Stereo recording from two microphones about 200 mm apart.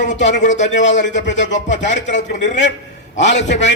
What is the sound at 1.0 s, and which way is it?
Speech, 60° left (ahead or behind).